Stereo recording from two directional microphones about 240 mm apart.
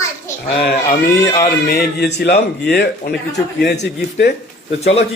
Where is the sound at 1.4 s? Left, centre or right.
Left.